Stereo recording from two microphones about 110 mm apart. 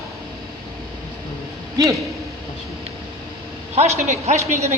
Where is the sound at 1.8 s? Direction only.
35° right (ahead or behind).